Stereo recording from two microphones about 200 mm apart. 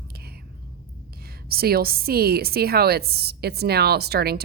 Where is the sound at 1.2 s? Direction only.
50° right (ahead or behind).